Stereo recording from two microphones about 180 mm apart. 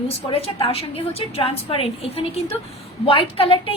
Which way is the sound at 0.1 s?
30° left (ahead or behind).